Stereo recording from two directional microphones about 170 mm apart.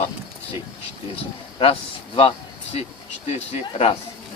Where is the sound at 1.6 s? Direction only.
35° left (ahead or behind).